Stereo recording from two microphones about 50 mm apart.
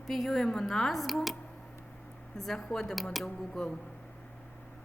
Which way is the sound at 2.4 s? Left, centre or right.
Centre.